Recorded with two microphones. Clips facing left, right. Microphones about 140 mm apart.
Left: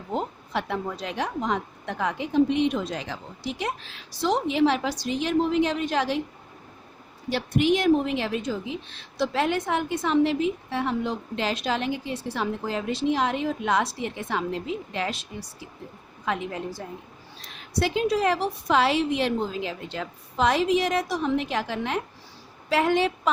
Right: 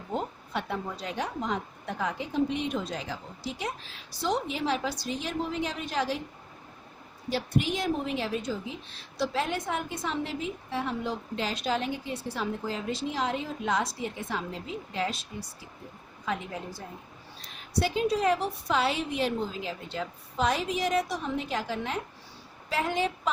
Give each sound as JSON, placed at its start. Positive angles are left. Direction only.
{"t": 0.5, "sound": "a woman's voice", "side_deg": 90}
{"t": 7.3, "sound": "a woman's voice", "side_deg": 80}
{"t": 17.4, "sound": "a woman's voice", "side_deg": 90}